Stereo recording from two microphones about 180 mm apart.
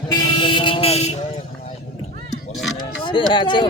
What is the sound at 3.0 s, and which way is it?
Speech, 25° left (ahead or behind).